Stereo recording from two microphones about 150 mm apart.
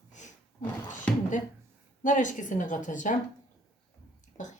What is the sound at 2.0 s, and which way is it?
Speech, 60° left (ahead or behind).